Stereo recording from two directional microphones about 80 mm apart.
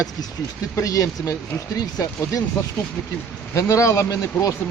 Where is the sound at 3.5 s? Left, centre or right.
Left.